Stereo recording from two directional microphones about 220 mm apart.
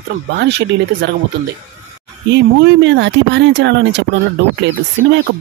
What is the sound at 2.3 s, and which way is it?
Speech, 55° right (ahead or behind).